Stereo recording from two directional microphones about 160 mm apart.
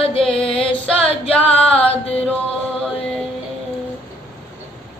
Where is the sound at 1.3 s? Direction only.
10° left (ahead or behind).